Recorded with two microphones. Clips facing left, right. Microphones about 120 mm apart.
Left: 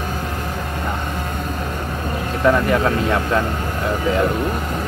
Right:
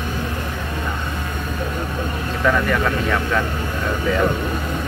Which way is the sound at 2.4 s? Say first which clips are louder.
Left 3 dB; 30° left (ahead or behind).